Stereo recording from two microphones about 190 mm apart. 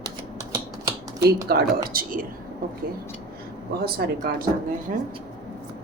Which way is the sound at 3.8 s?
50° right (ahead or behind).